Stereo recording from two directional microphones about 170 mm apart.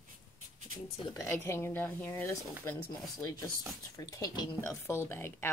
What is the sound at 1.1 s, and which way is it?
Speech, 15° left (ahead or behind).